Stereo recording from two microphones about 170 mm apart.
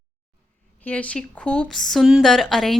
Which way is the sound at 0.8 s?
5° left (ahead or behind).